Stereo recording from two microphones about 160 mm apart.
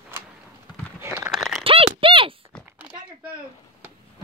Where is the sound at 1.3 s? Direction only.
Centre (ahead or behind).